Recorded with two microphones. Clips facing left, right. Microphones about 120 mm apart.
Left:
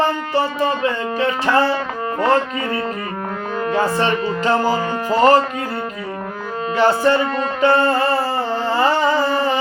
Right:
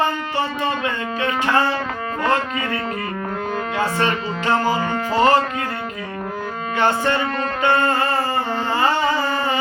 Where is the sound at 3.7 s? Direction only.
35° left (ahead or behind).